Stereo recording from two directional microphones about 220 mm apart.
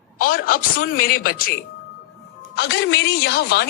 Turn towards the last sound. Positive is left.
turn(degrees=45)  # may be behind; listen again after turning